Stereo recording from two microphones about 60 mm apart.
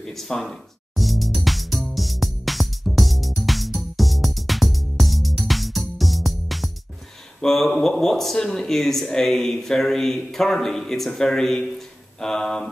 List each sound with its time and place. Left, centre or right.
0.0 s music: centre
7.4 s speech: centre
12.2 s mantra: centre